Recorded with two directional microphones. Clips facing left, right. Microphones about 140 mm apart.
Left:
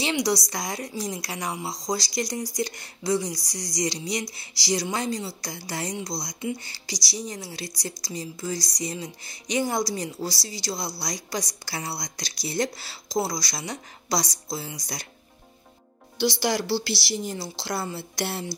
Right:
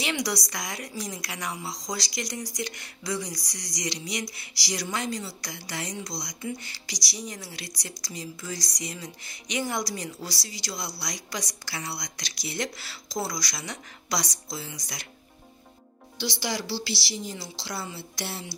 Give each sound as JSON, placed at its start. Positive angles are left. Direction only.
{"t": 0.0, "sound": "a woman's voice", "side_deg": 25}
{"t": 16.2, "sound": "a woman's voice", "side_deg": 55}